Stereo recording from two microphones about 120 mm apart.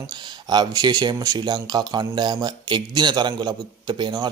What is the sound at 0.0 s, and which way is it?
Speech, 35° right (ahead or behind).